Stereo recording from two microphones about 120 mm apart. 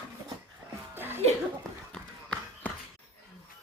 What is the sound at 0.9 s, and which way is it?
Music, 20° right (ahead or behind).